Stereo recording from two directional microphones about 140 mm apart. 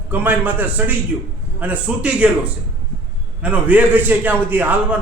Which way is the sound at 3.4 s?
10° right (ahead or behind).